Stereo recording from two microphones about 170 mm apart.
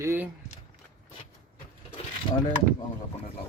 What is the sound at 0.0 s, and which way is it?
Speech, 15° right (ahead or behind).